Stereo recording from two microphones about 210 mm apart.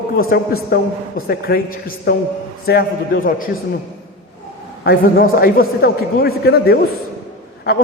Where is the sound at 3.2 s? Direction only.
40° left (ahead or behind).